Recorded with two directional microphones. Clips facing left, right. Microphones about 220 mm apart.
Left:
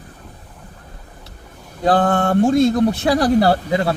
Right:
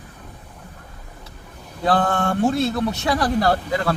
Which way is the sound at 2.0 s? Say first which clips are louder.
Left 7 dB; 50° left (ahead or behind).